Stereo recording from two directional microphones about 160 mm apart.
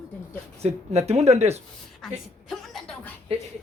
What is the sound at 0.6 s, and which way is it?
Speech, 45° right (ahead or behind).